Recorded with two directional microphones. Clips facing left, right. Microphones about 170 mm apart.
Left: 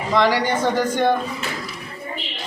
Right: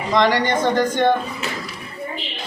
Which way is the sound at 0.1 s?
10° left (ahead or behind).